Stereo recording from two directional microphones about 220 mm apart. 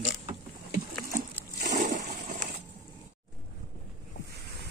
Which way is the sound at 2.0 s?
50° right (ahead or behind).